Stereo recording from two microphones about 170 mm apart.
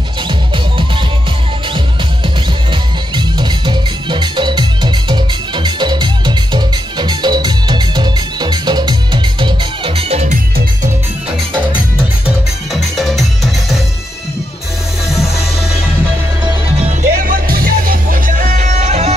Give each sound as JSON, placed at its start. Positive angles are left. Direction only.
{"t": 2.2, "sound": "music", "side_deg": -25}
{"t": 12.3, "sound": "music", "side_deg": 0}
{"t": 17.0, "sound": "music", "side_deg": -50}